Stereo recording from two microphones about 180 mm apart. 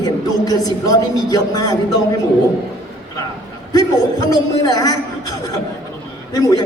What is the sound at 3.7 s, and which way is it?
Speech, 20° left (ahead or behind).